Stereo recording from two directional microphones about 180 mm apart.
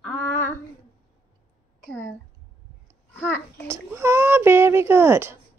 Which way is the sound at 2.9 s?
10° left (ahead or behind).